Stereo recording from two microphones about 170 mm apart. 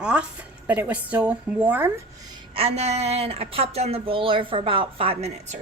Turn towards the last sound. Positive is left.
turn(degrees=-40)  # may be behind; listen again after turning